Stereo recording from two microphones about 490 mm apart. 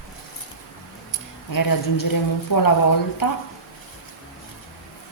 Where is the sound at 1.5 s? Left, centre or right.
Left.